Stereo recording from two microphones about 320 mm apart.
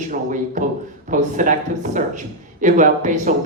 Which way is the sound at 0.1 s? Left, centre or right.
Right.